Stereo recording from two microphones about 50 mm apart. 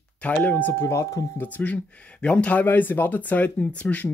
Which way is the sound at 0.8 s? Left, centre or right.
Left.